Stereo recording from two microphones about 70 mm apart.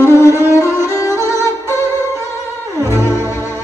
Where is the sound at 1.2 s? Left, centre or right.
Right.